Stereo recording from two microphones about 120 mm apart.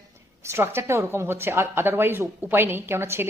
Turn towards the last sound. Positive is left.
turn(degrees=-20)  # may be behind; listen again after turning